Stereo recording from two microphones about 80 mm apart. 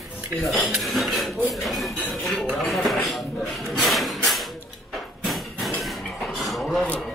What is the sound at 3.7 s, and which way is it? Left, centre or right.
Wood, centre.